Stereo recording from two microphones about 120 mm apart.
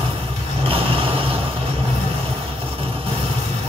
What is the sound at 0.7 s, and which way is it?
Vehicle, 50° right (ahead or behind).